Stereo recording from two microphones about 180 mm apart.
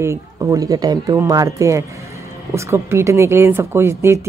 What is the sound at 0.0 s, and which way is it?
Speech, 15° right (ahead or behind).